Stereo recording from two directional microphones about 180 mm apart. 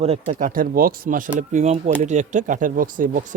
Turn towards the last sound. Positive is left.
turn(degrees=-45)  # may be behind; listen again after turning